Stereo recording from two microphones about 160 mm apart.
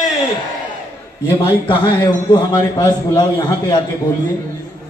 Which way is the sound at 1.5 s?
30° left (ahead or behind).